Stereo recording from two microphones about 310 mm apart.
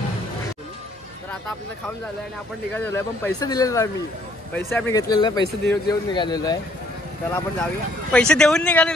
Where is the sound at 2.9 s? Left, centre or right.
Centre.